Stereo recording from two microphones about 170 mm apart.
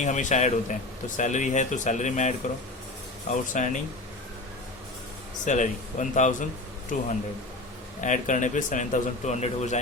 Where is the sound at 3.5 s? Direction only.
45° left (ahead or behind).